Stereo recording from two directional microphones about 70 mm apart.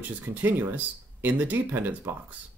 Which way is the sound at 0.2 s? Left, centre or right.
Right.